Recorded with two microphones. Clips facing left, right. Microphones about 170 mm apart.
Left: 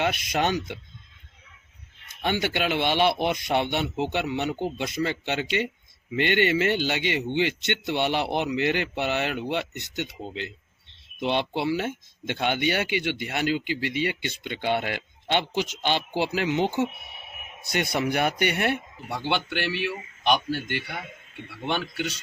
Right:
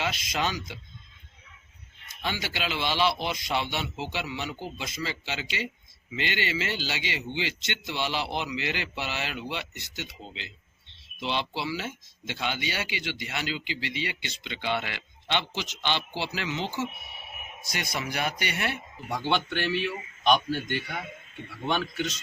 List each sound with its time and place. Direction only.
0.0 s speech: 60° left (ahead or behind)
2.2 s speech: 55° left (ahead or behind)
20.2 s a man's voice: 5° left (ahead or behind)